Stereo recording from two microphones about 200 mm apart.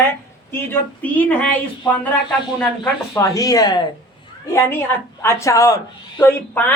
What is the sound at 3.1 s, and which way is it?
Speech, 15° left (ahead or behind).